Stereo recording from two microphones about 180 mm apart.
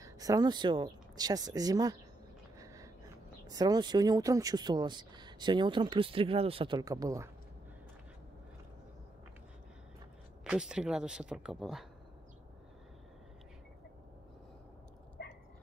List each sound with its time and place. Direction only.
0.0 s speech: 20° right (ahead or behind)
2.6 s a sound: 20° right (ahead or behind)
3.4 s speech: 20° right (ahead or behind)
10.4 s speech: 5° right (ahead or behind)